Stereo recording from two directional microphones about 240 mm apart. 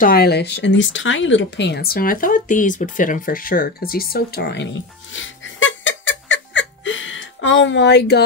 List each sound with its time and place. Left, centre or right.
0.0 s speech: left